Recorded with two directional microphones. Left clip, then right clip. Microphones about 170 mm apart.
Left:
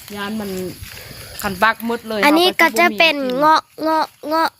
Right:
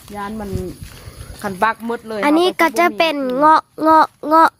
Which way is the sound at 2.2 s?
20° right (ahead or behind).